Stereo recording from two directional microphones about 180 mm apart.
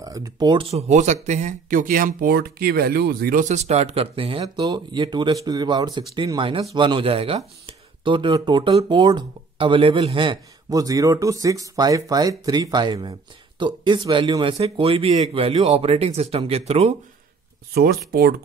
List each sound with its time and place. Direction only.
0.0 s speech: 20° right (ahead or behind)
17.7 s speech: 60° right (ahead or behind)